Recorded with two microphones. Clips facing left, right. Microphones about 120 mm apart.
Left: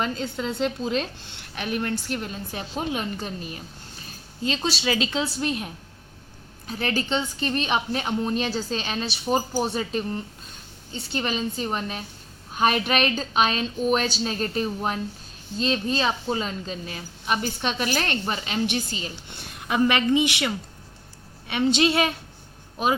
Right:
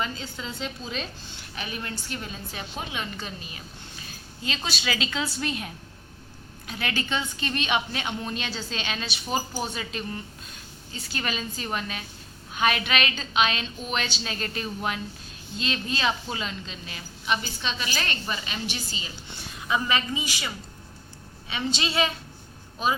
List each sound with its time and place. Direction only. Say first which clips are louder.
0.0 s a woman's voice: left 5 dB; 60° left (ahead or behind)
2.6 s a woman's voice: left 6 dB; 40° left (ahead or behind)
6.7 s a woman's voice: left 4 dB; 35° left (ahead or behind); by 20.5 s 65° left (ahead or behind)
21.7 s a woman's voice: left 5 dB; 55° left (ahead or behind)